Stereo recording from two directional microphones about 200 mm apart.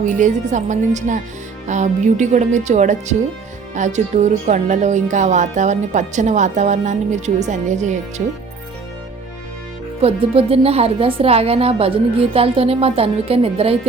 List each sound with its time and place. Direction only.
0.0 s speech: 40° right (ahead or behind)
10.0 s a woman's voice: 30° right (ahead or behind)